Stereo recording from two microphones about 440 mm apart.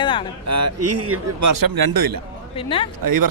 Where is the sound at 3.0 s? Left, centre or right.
Right.